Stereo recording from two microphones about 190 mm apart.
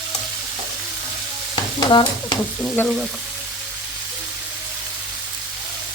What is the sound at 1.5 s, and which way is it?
Stir, 20° left (ahead or behind).